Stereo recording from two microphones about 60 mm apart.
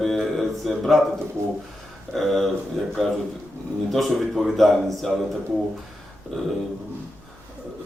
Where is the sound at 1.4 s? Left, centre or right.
Right.